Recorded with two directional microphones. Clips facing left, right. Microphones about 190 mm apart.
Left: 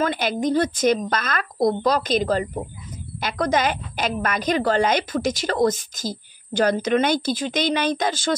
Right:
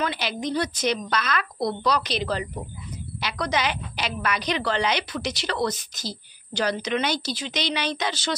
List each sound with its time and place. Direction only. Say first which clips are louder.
0.0 s a woman's voice: left 6 dB; 50° left (ahead or behind)